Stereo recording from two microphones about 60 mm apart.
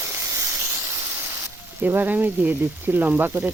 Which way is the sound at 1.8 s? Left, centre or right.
Right.